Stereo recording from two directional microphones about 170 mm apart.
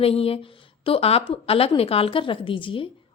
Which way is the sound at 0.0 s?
35° left (ahead or behind).